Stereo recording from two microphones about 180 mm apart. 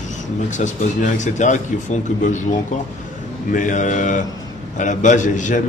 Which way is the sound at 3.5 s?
45° left (ahead or behind).